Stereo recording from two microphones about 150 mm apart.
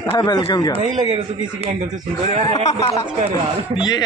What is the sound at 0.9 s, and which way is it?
Speech, 30° right (ahead or behind).